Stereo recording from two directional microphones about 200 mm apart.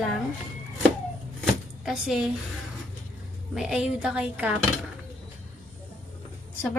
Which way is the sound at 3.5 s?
5° right (ahead or behind).